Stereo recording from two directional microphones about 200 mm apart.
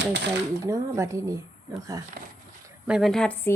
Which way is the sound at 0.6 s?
15° right (ahead or behind).